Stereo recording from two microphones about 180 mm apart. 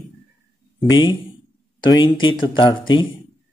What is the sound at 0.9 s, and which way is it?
Speech, 25° left (ahead or behind).